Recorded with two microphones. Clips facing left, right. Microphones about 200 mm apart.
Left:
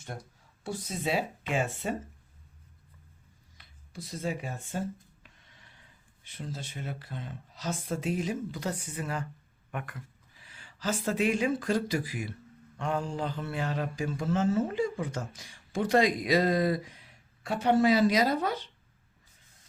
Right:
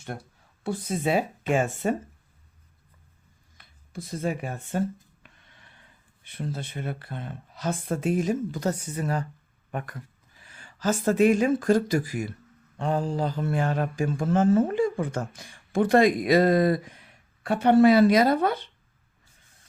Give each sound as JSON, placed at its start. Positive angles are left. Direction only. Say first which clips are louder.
{"t": 0.6, "sound": "speech", "louder": "right 6 dB", "side_deg": -55}
{"t": 3.6, "sound": "speech", "louder": "right 5 dB", "side_deg": -50}
{"t": 10.3, "sound": "speech", "louder": "right 5 dB", "side_deg": -45}
{"t": 12.8, "sound": "speech", "louder": "right 5 dB", "side_deg": -35}